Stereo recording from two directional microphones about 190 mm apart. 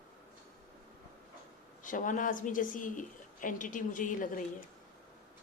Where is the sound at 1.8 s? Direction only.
45° left (ahead or behind).